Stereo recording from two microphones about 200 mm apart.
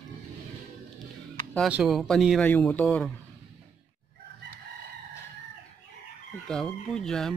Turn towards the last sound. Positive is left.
turn(degrees=0)  # may be behind; listen again after turning